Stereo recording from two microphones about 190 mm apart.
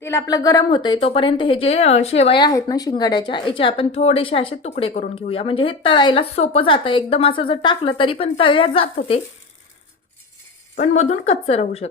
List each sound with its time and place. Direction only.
0.0 s a woman's voice: 15° left (ahead or behind)
10.8 s a woman's voice: 35° left (ahead or behind)